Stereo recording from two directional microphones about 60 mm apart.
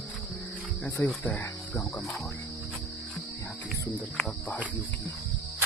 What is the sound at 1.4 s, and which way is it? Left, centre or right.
Cricket, left.